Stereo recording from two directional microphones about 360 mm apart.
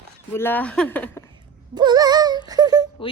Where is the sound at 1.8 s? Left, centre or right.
Centre.